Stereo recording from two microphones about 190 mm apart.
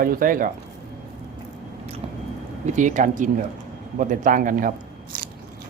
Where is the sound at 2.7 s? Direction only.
40° right (ahead or behind).